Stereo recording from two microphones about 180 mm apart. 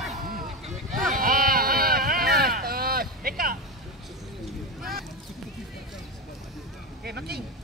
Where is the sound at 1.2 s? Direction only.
50° right (ahead or behind).